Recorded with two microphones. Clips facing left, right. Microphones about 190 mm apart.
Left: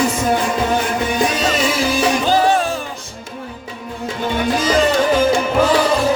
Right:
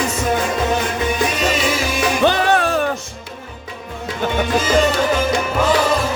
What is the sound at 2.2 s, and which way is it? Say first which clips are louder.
Music: right 3 dB; 65° right (ahead or behind).